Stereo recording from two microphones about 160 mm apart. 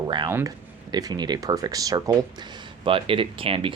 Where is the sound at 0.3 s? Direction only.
15° right (ahead or behind).